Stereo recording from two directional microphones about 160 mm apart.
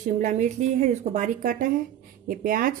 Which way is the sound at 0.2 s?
50° right (ahead or behind).